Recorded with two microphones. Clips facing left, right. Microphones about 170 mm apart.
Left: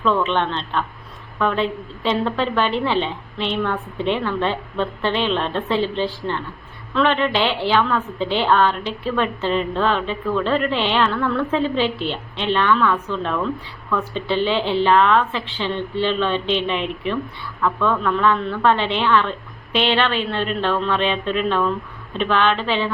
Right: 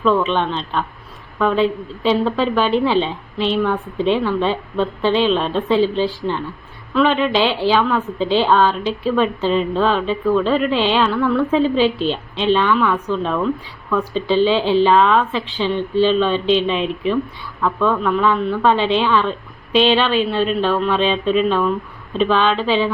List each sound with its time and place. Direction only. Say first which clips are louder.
0.0 s a woman's voice: right 3 dB; 15° right (ahead or behind)
3.3 s a woman's voice: right 6 dB; 20° left (ahead or behind)
3.6 s a woman's voice: right 4 dB; 15° right (ahead or behind)
14.4 s a woman's voice: right 3 dB; 15° right (ahead or behind)